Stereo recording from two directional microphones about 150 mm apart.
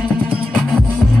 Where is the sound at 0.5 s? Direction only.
Centre (ahead or behind).